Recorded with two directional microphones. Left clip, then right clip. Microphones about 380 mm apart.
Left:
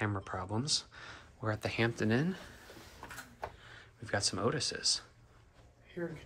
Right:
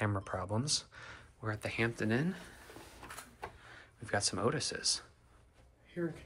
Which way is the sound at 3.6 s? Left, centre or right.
Centre.